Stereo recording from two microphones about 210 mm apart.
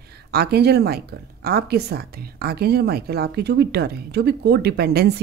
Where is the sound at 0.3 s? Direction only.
50° right (ahead or behind).